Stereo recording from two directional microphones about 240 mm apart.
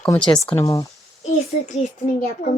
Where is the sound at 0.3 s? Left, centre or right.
Centre.